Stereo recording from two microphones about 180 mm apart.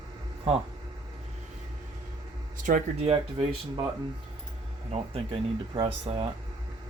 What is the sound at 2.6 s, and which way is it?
Speech, 45° right (ahead or behind).